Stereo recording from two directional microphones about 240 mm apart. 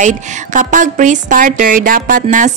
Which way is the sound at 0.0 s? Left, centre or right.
Right.